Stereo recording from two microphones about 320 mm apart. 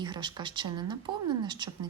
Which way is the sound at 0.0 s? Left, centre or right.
Centre.